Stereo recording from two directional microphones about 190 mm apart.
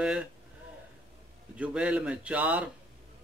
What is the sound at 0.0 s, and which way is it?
Speech, 5° right (ahead or behind).